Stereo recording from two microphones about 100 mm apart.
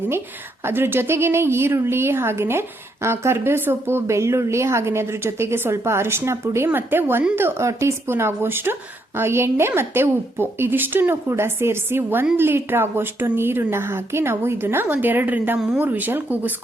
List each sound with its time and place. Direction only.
0.6 s a woman's voice: 20° right (ahead or behind)